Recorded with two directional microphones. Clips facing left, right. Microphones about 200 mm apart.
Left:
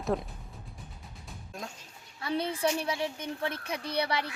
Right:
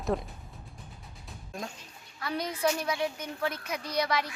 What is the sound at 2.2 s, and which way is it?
A woman's voice, 25° left (ahead or behind).